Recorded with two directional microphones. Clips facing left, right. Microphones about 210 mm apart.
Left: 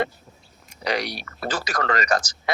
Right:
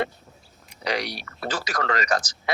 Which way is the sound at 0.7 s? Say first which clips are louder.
Left 2 dB; 50° left (ahead or behind).